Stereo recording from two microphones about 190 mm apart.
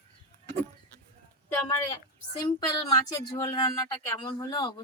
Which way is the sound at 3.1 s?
20° left (ahead or behind).